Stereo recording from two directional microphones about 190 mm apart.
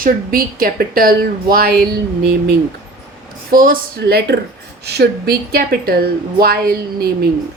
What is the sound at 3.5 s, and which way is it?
A woman's voice, 45° right (ahead or behind).